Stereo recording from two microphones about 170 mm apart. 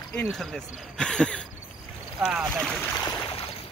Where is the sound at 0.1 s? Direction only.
5° left (ahead or behind).